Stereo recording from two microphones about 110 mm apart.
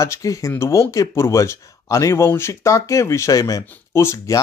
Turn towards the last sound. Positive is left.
turn(degrees=25)  # may be behind; listen again after turning